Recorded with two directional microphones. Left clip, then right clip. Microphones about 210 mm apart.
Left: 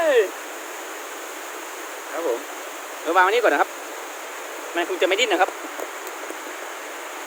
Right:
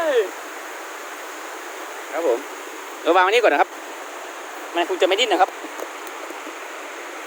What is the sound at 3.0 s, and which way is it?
Speech, 45° right (ahead or behind).